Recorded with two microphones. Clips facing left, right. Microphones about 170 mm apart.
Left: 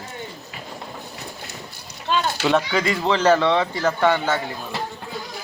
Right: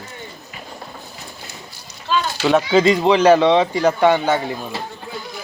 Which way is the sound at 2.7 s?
20° right (ahead or behind).